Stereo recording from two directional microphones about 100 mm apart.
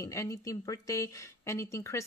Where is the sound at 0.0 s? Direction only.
30° left (ahead or behind).